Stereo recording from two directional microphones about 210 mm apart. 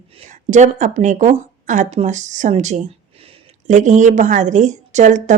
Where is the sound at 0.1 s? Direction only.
30° right (ahead or behind).